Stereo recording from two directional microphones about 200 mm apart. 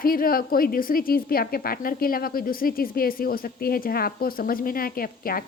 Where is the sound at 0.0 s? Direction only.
45° left (ahead or behind).